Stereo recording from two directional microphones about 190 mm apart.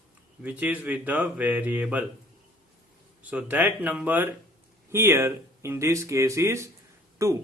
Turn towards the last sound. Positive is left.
turn(degrees=-15)  # may be behind; listen again after turning